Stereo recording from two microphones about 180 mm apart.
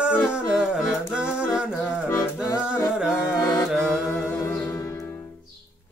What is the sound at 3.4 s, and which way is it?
Music, 20° left (ahead or behind).